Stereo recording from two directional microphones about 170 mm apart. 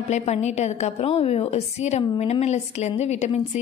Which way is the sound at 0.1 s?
40° left (ahead or behind).